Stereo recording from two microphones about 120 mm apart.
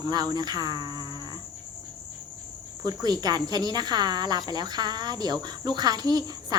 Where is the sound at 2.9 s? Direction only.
35° right (ahead or behind).